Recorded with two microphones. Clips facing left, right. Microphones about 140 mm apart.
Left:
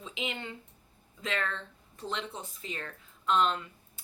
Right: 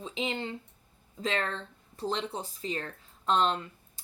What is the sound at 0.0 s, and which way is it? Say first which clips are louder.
A woman's voice: right 4 dB; 35° right (ahead or behind).